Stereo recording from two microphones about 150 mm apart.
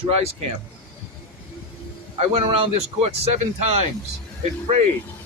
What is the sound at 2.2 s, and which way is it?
Speech, 40° right (ahead or behind).